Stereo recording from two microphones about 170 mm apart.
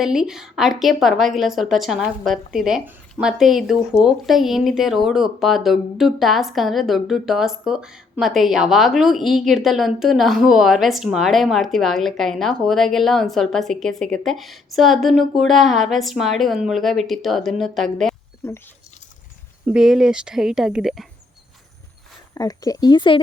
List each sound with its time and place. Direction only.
0.0 s a woman's voice: 5° right (ahead or behind)
18.4 s speech: 15° left (ahead or behind)
19.6 s a woman's voice: 5° right (ahead or behind)
22.4 s speech: 20° left (ahead or behind)